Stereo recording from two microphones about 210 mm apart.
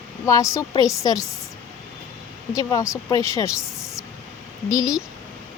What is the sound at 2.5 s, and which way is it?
Speech, 15° left (ahead or behind).